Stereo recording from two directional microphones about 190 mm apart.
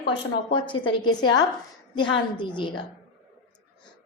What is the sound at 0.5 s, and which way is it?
A woman's voice, 25° left (ahead or behind).